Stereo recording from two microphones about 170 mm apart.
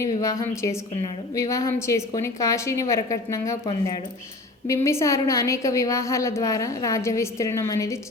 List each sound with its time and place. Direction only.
0.0 s a woman's voice: 20° left (ahead or behind)